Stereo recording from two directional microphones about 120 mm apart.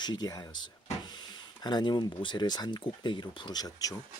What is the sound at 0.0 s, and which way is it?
Speech, 35° left (ahead or behind).